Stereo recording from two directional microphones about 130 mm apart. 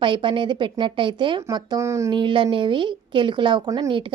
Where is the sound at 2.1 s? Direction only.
40° right (ahead or behind).